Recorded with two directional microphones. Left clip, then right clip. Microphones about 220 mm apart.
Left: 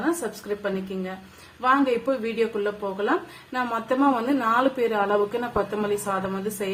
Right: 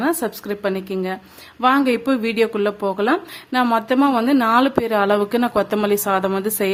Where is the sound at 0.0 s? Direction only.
50° right (ahead or behind).